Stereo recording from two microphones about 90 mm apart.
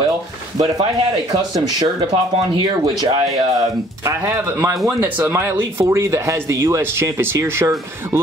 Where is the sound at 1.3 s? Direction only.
45° right (ahead or behind).